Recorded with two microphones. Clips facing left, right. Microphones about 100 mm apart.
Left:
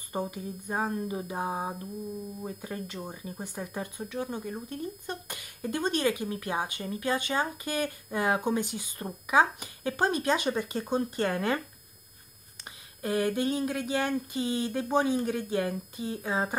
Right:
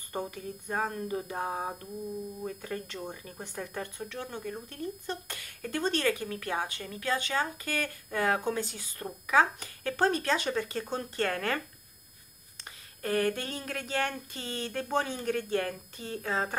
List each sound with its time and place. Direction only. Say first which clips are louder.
0.1 s speech: left 2 dB; 10° left (ahead or behind)
13.0 s speech: left 2 dB; 15° left (ahead or behind)